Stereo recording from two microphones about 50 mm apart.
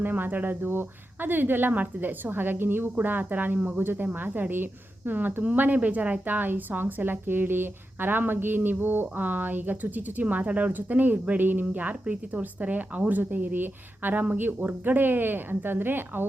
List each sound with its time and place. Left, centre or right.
0.0 s speech: right